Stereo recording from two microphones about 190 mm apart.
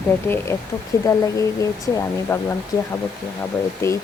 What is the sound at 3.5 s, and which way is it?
Speech, 5° left (ahead or behind).